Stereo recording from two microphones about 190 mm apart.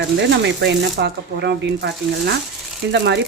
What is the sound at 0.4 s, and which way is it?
Speech, 65° right (ahead or behind).